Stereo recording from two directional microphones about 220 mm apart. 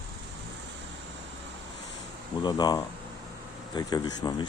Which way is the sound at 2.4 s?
20° left (ahead or behind).